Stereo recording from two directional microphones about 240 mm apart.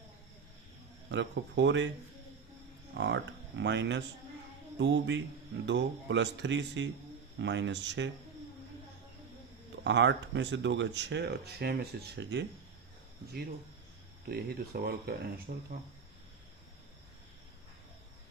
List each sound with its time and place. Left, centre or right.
1.1 s speech: right
3.0 s speech: right
9.8 s speech: right
14.3 s speech: right